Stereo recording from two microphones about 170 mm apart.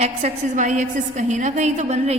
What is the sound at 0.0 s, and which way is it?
A woman's voice, 45° right (ahead or behind).